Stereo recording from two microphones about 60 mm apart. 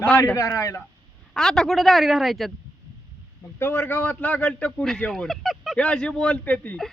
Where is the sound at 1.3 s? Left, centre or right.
Centre.